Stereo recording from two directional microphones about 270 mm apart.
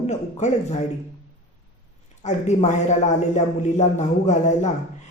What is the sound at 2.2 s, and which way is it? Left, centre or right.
Speech, left.